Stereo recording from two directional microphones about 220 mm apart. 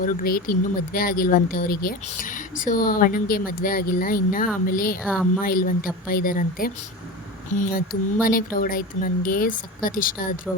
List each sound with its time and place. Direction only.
0.0 s speech: 40° left (ahead or behind)